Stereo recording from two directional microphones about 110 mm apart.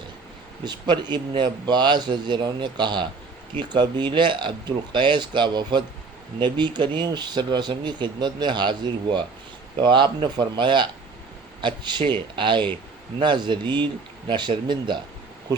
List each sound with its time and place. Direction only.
0.6 s speech: 40° right (ahead or behind)